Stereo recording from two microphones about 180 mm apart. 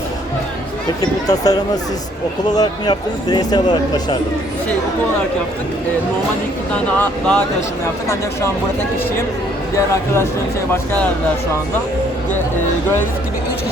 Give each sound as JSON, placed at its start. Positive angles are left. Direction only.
{"t": 1.0, "sound": "speech", "side_deg": 20}
{"t": 7.0, "sound": "speech", "side_deg": 5}
{"t": 9.7, "sound": "speech", "side_deg": 15}